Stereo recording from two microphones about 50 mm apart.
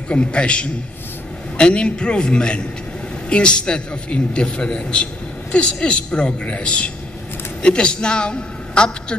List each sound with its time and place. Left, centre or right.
0.1 s a man's voice: left